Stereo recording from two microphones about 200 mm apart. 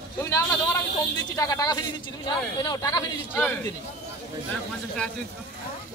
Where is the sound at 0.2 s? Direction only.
15° left (ahead or behind).